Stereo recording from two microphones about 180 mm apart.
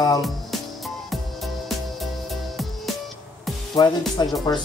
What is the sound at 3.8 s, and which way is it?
Music, 20° left (ahead or behind).